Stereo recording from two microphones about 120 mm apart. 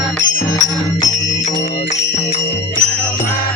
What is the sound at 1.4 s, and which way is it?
Music, 70° left (ahead or behind).